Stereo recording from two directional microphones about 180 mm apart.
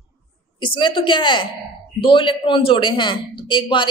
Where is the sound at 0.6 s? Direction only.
25° left (ahead or behind).